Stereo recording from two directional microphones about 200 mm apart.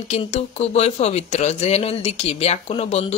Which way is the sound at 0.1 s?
30° left (ahead or behind).